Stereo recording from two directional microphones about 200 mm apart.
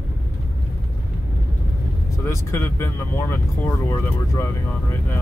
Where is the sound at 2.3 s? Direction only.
15° left (ahead or behind).